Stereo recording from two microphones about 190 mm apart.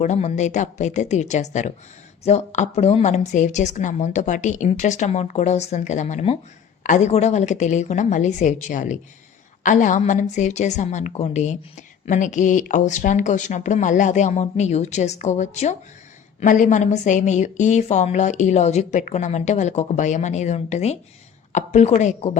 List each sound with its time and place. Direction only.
0.0 s a woman's voice: 35° left (ahead or behind)